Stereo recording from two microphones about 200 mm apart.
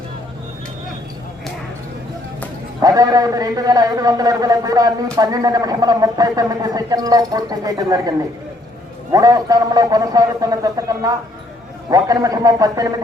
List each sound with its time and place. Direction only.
2.8 s speech: 15° right (ahead or behind)
9.1 s a man's voice: 20° right (ahead or behind)